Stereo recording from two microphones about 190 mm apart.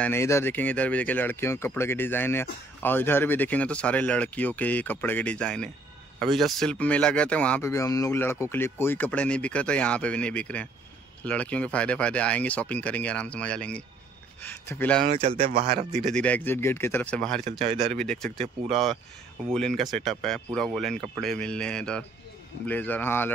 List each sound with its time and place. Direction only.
0.0 s speech: 15° left (ahead or behind)
15.0 s speech: 35° right (ahead or behind)
16.0 s speech: 5° left (ahead or behind)